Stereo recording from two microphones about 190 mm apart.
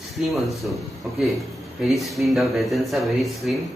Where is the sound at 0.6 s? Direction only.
5° right (ahead or behind).